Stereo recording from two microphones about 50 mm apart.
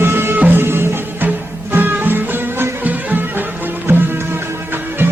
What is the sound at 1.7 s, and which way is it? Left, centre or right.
Music, right.